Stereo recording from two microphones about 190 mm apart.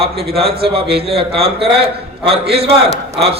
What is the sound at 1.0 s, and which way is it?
A man's voice, 30° right (ahead or behind).